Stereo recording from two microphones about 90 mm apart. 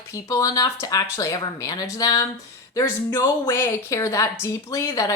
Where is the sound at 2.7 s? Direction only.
30° left (ahead or behind).